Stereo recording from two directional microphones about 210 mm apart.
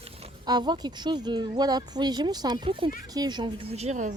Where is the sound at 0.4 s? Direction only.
20° right (ahead or behind).